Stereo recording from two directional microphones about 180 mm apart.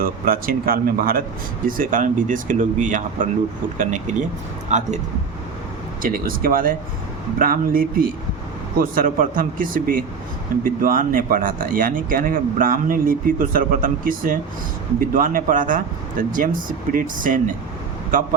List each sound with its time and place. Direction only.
0.0 s speech: 55° right (ahead or behind)
6.0 s speech: 50° right (ahead or behind)